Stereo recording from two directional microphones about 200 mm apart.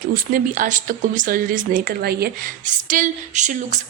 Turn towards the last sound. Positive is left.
turn(degrees=-35)  # may be behind; listen again after turning